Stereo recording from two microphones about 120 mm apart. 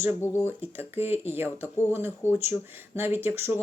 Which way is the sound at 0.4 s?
20° right (ahead or behind).